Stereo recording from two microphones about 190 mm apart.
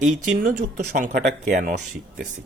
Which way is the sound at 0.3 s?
45° right (ahead or behind).